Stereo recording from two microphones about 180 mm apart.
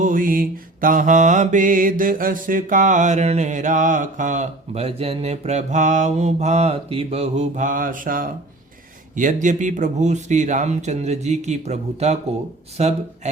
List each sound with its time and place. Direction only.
0.0 s mantra: 50° right (ahead or behind)
9.1 s speech: 45° right (ahead or behind)